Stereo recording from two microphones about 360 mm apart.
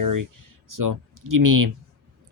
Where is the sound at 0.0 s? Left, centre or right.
Right.